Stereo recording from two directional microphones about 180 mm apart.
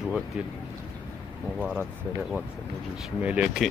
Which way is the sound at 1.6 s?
Centre (ahead or behind).